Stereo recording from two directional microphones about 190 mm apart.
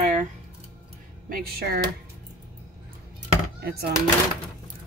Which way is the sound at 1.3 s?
55° right (ahead or behind).